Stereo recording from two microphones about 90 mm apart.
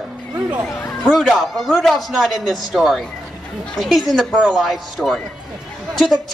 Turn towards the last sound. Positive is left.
turn(degrees=0)  # may be behind; listen again after turning